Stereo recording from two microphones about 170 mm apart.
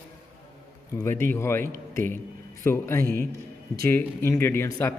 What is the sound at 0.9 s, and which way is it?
Speech, 15° left (ahead or behind).